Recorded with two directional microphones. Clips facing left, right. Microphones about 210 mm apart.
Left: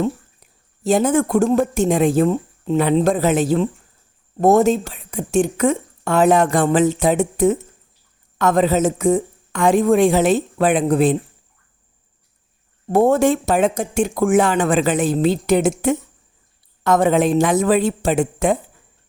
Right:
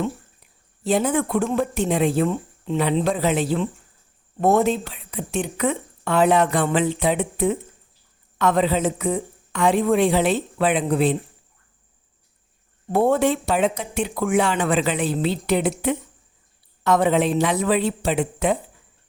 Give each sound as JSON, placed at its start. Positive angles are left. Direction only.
{"t": 0.9, "sound": "a woman's voice", "side_deg": 45}
{"t": 12.9, "sound": "a woman's voice", "side_deg": 45}